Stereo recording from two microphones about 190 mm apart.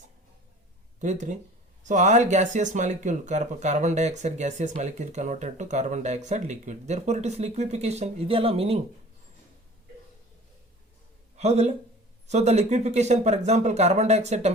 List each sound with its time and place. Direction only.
0.9 s speech: 40° right (ahead or behind)
11.3 s speech: 35° right (ahead or behind)